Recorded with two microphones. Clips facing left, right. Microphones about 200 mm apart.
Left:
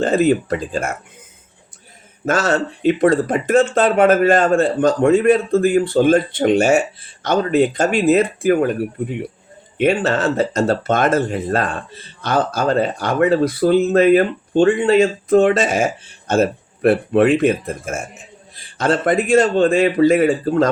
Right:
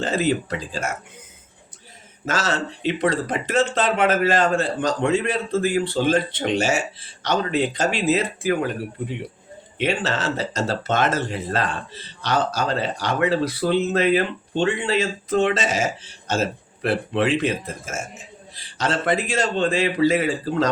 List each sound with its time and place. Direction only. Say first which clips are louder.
0.0 s speech: left 7 dB; 50° left (ahead or behind)
2.2 s speech: left 7 dB; 50° left (ahead or behind)
9.7 s speech: left 7 dB; 50° left (ahead or behind)